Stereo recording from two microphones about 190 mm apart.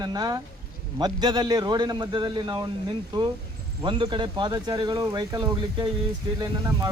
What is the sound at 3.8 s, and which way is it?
Speech, 25° right (ahead or behind).